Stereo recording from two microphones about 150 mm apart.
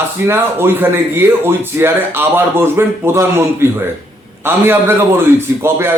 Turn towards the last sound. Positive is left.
turn(degrees=-15)  # may be behind; listen again after turning